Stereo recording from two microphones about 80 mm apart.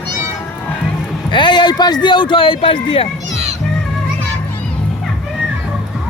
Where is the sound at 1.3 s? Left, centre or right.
Left.